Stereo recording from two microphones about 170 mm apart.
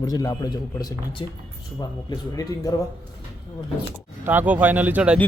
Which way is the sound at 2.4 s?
20° left (ahead or behind).